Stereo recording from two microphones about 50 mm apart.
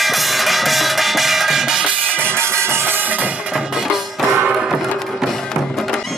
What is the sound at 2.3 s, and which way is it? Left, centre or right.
Music, right.